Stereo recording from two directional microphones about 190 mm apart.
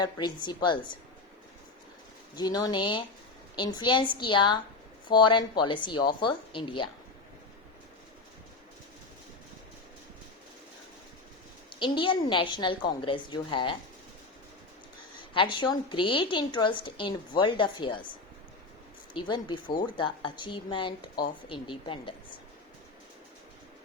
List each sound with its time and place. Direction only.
0.0 s a woman's voice: 20° left (ahead or behind)
2.3 s a woman's voice: 20° left (ahead or behind)
11.8 s a woman's voice: 25° left (ahead or behind)
15.3 s a woman's voice: 25° left (ahead or behind)
19.1 s a woman's voice: 25° left (ahead or behind)